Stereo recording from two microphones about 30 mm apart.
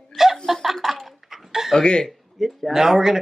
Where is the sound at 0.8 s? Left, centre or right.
Centre.